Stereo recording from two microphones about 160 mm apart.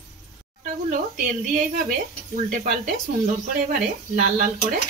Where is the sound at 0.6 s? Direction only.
55° right (ahead or behind).